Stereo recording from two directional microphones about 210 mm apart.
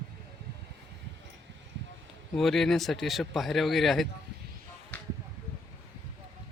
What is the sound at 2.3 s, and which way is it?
Speech, centre (ahead or behind).